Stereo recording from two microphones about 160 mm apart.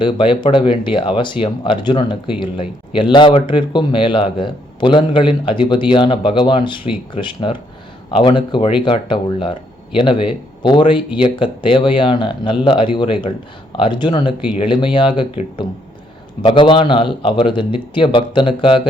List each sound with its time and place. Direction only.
0.0 s speech: 30° left (ahead or behind)